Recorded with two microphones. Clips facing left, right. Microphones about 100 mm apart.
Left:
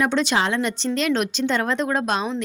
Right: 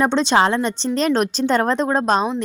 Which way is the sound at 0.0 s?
30° right (ahead or behind).